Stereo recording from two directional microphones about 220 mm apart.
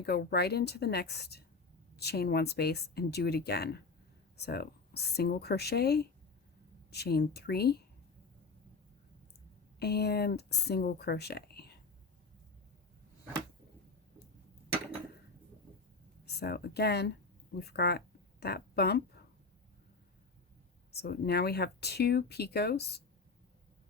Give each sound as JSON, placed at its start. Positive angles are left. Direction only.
{"t": 0.0, "sound": "speech", "side_deg": 45}
{"t": 9.7, "sound": "speech", "side_deg": 45}
{"t": 16.2, "sound": "speech", "side_deg": 45}
{"t": 20.9, "sound": "speech", "side_deg": 45}